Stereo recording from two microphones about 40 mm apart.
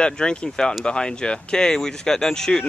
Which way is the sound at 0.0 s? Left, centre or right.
Left.